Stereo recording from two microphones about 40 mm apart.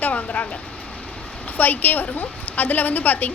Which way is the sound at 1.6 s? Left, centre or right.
Left.